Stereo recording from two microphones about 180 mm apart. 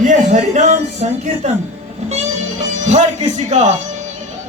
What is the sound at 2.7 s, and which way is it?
Speech, 40° right (ahead or behind).